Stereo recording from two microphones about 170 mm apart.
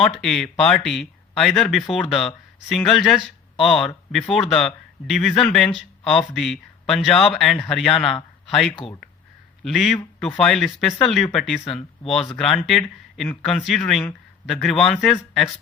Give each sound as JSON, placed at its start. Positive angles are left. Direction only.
{"t": 0.0, "sound": "speech", "side_deg": 0}
{"t": 11.6, "sound": "speech", "side_deg": 30}
{"t": 12.1, "sound": "speech", "side_deg": 0}